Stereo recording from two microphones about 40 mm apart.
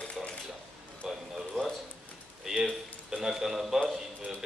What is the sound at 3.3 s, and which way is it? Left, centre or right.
Speech, centre.